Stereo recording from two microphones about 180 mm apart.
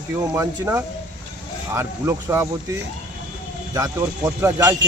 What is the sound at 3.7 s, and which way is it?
Speech, 15° right (ahead or behind).